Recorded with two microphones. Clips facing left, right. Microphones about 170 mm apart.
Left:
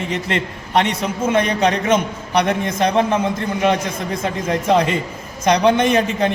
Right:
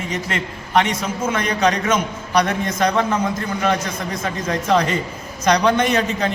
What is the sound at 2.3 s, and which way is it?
Speech, 25° left (ahead or behind).